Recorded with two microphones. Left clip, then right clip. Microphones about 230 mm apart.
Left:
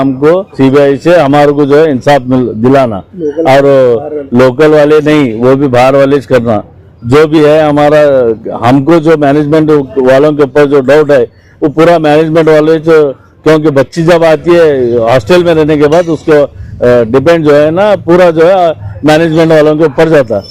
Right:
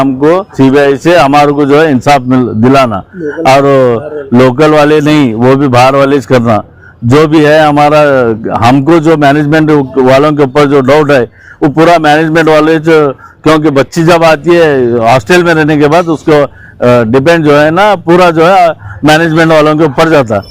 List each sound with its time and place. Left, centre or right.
0.0 s a man's voice: right
17.2 s a man's voice: right